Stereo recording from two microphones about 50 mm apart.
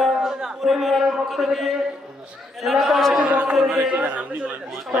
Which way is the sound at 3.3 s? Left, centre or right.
Right.